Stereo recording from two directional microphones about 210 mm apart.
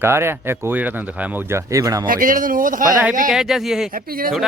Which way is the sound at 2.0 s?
40° right (ahead or behind).